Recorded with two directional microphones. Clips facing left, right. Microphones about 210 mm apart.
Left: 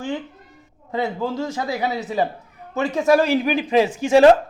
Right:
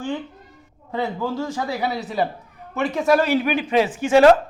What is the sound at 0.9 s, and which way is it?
A man's voice, 15° left (ahead or behind).